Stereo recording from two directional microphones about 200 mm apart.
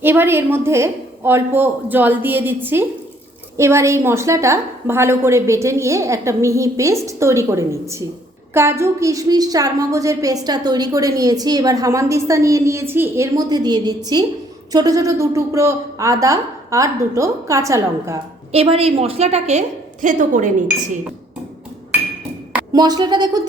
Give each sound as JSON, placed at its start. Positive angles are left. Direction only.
{"t": 0.0, "sound": "a woman's voice", "side_deg": -10}
{"t": 18.5, "sound": "a woman's voice", "side_deg": -30}
{"t": 22.7, "sound": "a woman's voice", "side_deg": -20}